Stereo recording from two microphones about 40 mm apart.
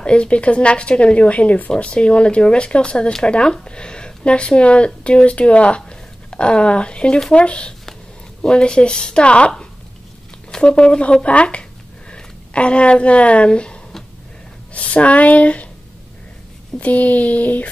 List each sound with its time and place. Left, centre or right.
0.0 s speech: left
10.6 s speech: left
16.8 s a sound: left